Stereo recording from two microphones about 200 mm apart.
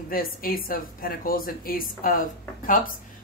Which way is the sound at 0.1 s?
45° left (ahead or behind).